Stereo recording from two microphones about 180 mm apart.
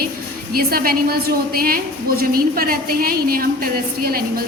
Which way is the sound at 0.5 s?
55° right (ahead or behind).